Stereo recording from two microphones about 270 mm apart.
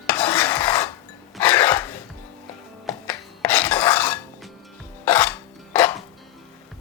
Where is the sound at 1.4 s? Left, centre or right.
Centre.